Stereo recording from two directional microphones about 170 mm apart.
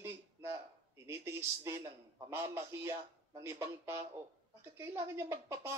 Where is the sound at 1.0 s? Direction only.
15° right (ahead or behind).